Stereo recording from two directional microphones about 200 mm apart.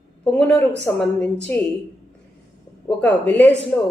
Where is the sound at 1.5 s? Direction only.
10° left (ahead or behind).